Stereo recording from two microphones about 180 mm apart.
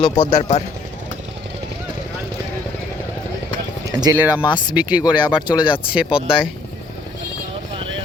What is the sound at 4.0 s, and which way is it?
Speech, 15° right (ahead or behind).